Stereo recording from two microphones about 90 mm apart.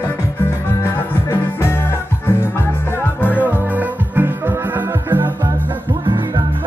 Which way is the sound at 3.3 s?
20° right (ahead or behind).